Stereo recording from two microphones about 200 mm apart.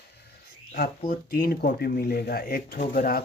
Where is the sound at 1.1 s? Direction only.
50° left (ahead or behind).